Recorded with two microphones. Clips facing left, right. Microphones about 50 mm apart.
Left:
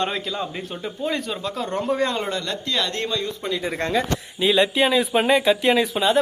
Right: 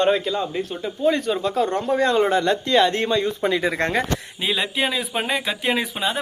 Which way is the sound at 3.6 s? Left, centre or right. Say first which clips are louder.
Right 2 dB; right.